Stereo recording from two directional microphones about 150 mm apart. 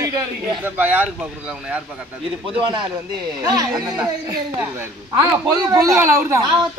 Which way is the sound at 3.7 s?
5° right (ahead or behind).